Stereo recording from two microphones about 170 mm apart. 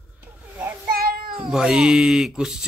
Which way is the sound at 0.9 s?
60° right (ahead or behind).